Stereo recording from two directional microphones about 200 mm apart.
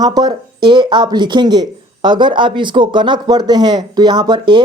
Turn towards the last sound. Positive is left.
turn(degrees=-25)  # may be behind; listen again after turning